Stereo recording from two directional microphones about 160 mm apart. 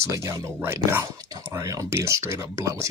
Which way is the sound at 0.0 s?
20° right (ahead or behind).